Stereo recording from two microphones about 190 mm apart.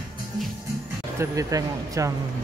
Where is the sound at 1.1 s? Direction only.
15° right (ahead or behind).